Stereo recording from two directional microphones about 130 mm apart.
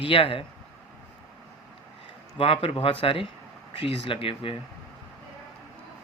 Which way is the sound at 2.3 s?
45° left (ahead or behind).